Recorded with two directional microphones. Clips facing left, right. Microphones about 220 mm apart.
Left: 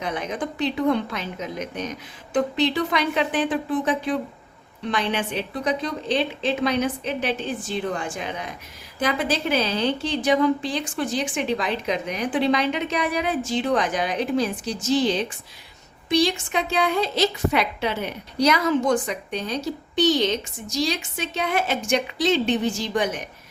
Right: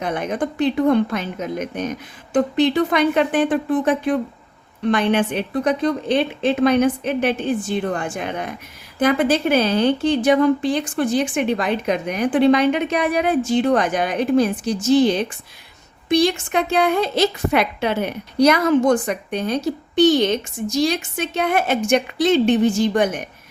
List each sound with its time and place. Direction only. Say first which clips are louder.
0.0 s a woman's voice: right 5 dB; 55° right (ahead or behind)